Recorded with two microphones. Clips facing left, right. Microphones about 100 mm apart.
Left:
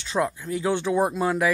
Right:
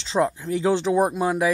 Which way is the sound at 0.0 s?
25° right (ahead or behind).